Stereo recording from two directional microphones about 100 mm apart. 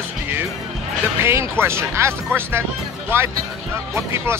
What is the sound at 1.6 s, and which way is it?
Speech, 25° right (ahead or behind).